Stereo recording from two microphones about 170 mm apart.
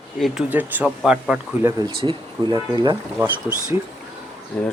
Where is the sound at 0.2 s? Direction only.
5° right (ahead or behind).